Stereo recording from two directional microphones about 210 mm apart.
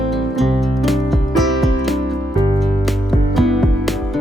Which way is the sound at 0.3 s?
Centre (ahead or behind).